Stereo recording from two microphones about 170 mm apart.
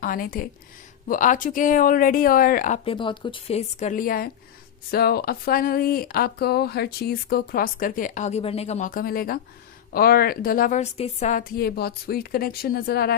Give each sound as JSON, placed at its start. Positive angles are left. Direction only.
{"t": 0.0, "sound": "speech", "side_deg": 55}
{"t": 2.8, "sound": "speech", "side_deg": 30}
{"t": 8.9, "sound": "speech", "side_deg": 60}